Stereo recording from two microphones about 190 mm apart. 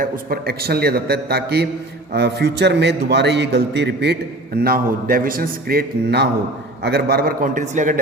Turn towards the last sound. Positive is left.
turn(degrees=-40)  # may be behind; listen again after turning